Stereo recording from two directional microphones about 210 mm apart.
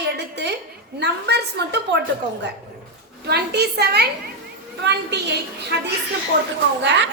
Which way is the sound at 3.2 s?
50° right (ahead or behind).